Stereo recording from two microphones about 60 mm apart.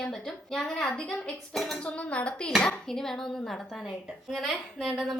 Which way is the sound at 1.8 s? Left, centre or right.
Centre.